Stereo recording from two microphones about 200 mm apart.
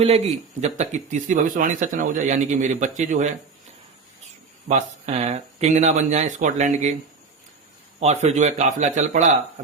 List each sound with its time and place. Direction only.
0.6 s a man's voice: 35° right (ahead or behind)
4.7 s a man's voice: 35° right (ahead or behind)
7.9 s a man's voice: 35° right (ahead or behind)